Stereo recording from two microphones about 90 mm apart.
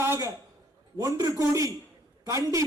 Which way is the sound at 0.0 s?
30° right (ahead or behind).